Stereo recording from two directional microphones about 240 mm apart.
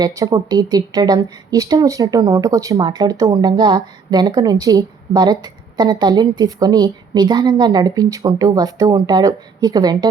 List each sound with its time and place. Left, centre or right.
0.0 s a woman's voice: centre